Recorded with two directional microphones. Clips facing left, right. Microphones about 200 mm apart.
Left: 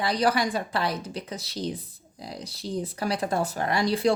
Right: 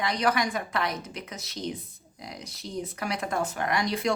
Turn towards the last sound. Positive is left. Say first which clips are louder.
# left 4 dB
turn(degrees=30)  # may be behind; listen again after turning